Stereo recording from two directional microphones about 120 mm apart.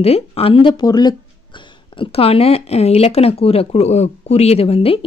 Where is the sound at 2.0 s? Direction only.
55° left (ahead or behind).